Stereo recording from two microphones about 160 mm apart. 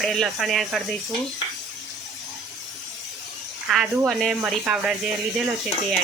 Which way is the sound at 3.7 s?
Centre (ahead or behind).